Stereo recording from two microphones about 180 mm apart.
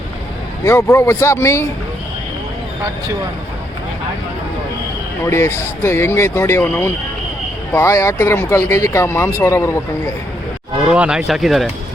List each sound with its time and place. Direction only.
0.6 s speech: 15° left (ahead or behind)
5.2 s speech: 15° left (ahead or behind)
10.9 s speech: 5° right (ahead or behind)